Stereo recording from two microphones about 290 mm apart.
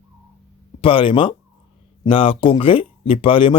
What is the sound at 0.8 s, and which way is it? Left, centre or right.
Speech, centre.